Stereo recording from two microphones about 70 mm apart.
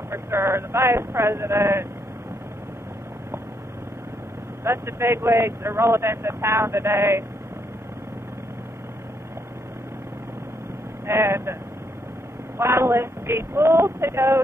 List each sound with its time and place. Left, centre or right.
0.1 s speech: right
4.6 s speech: right
11.1 s speech: right
12.5 s speech: right